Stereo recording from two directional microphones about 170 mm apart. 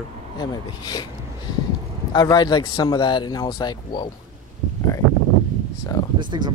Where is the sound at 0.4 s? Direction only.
25° left (ahead or behind).